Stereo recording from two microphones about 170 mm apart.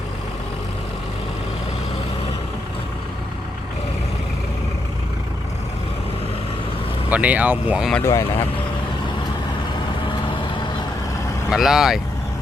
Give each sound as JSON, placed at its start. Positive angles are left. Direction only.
{"t": 7.1, "sound": "speech", "side_deg": -10}
{"t": 8.0, "sound": "speech", "side_deg": 15}
{"t": 11.5, "sound": "speech", "side_deg": 0}